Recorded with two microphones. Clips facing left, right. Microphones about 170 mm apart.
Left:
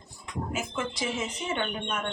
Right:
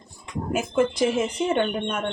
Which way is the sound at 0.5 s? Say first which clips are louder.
Right 12 dB; 55° right (ahead or behind).